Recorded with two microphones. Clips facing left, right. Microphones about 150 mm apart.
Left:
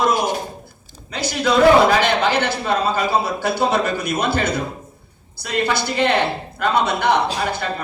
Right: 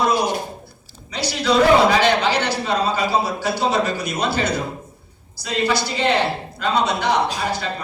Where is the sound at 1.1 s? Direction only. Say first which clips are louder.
Even; 50° left (ahead or behind).